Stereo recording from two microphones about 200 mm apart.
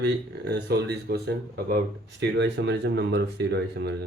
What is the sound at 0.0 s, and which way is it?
Speech, 55° right (ahead or behind).